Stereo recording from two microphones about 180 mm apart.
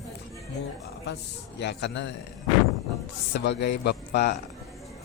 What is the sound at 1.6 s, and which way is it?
Speech, 70° left (ahead or behind).